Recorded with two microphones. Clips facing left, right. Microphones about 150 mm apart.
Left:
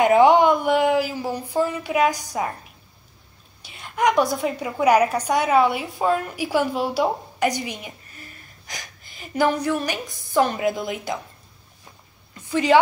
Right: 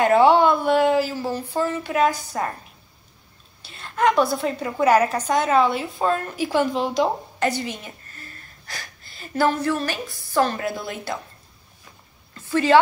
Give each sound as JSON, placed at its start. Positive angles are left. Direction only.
{"t": 0.0, "sound": "a woman's voice", "side_deg": 15}
{"t": 3.6, "sound": "a woman's voice", "side_deg": 15}
{"t": 12.4, "sound": "a sound", "side_deg": 15}